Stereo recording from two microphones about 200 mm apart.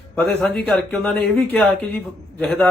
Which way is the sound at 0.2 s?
Centre (ahead or behind).